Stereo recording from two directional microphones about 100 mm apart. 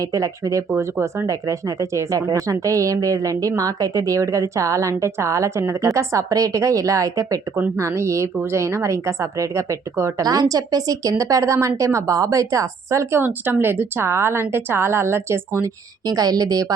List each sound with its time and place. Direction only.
0.0 s speech: 35° right (ahead or behind)
16.0 s speech: 40° right (ahead or behind)